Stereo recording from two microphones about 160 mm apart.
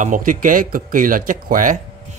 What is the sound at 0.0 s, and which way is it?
Speech, 55° right (ahead or behind).